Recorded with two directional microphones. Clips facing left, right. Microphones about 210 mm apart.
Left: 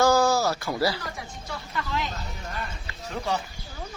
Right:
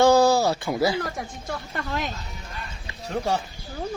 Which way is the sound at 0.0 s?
30° right (ahead or behind).